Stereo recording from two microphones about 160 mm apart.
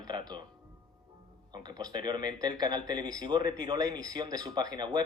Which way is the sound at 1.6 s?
25° right (ahead or behind).